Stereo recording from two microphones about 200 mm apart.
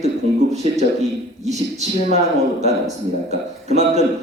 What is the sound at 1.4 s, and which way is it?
Speech, 35° right (ahead or behind).